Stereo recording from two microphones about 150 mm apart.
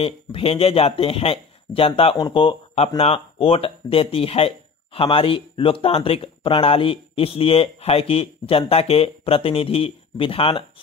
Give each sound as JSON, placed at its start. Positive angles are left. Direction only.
{"t": 0.0, "sound": "speech", "side_deg": 40}